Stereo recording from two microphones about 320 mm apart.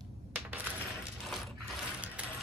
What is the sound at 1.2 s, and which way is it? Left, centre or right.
Ratchet, centre.